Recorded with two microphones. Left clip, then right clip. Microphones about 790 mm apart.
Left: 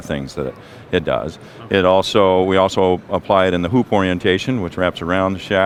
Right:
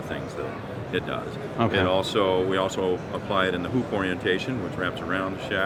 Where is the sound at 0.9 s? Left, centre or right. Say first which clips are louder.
Left 11 dB; left.